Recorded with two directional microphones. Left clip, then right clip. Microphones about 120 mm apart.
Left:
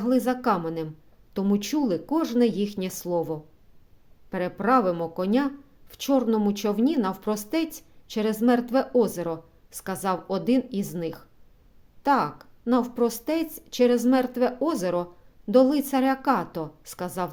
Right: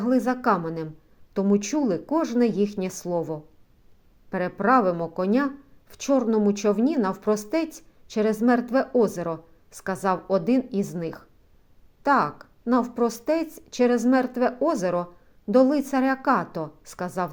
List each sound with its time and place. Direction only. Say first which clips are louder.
0.0 s speech: right 1 dB; 15° left (ahead or behind)